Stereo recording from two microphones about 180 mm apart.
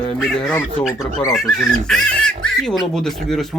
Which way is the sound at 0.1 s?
5° left (ahead or behind).